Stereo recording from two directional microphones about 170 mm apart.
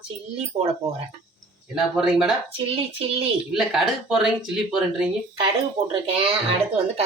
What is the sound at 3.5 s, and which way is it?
Speech, centre (ahead or behind).